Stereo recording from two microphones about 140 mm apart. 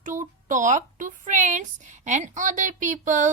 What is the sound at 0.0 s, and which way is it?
Speech, 65° right (ahead or behind).